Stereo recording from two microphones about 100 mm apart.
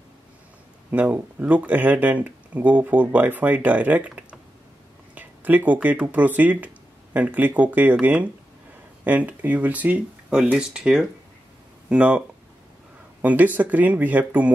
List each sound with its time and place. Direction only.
0.9 s speech: 15° right (ahead or behind)
13.2 s speech: 15° right (ahead or behind)